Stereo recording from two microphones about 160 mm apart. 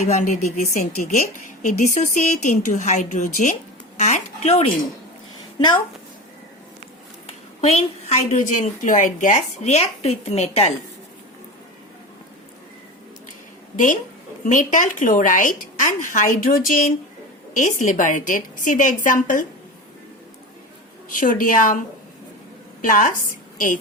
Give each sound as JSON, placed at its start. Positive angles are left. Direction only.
{"t": 0.1, "sound": "a woman's voice", "side_deg": 55}
{"t": 7.6, "sound": "a woman's voice", "side_deg": 40}
{"t": 13.7, "sound": "a woman's voice", "side_deg": 50}
{"t": 21.1, "sound": "a woman's voice", "side_deg": 55}
{"t": 22.8, "sound": "a woman's voice", "side_deg": 55}